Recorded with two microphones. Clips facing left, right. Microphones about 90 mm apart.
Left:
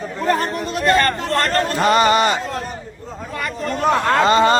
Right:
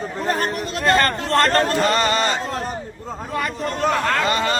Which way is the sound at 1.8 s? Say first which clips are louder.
Left 4 dB; 15° left (ahead or behind).